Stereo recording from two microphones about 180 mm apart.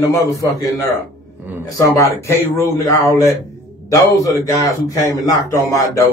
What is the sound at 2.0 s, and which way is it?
Speech, 15° left (ahead or behind).